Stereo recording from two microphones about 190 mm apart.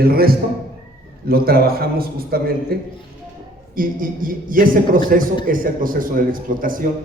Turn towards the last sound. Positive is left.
turn(degrees=-45)  # may be behind; listen again after turning